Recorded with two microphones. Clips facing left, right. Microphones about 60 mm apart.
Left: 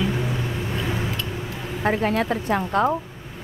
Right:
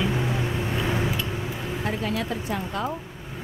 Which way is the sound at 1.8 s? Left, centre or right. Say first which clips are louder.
Left 8 dB; left.